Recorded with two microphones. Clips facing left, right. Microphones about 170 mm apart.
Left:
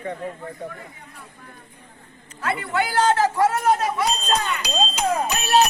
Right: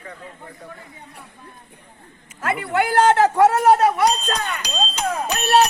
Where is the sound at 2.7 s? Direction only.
60° right (ahead or behind).